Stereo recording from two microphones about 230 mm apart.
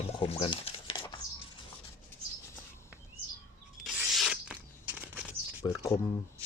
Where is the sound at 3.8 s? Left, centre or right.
Centre.